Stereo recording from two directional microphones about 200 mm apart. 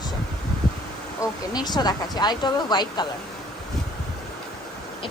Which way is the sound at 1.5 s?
20° left (ahead or behind).